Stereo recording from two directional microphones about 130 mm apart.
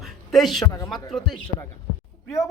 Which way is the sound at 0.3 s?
Centre (ahead or behind).